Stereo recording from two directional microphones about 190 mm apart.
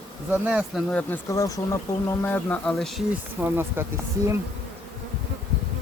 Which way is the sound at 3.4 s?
10° right (ahead or behind).